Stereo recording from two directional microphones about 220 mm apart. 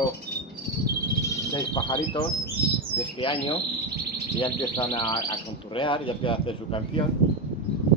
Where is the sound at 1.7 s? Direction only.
25° left (ahead or behind).